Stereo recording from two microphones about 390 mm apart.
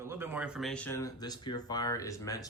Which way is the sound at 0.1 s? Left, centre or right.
Centre.